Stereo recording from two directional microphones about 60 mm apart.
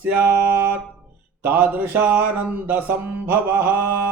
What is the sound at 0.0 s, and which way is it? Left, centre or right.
Mantra, right.